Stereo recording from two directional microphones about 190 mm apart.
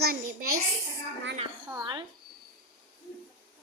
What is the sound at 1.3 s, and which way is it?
Speech, 25° right (ahead or behind).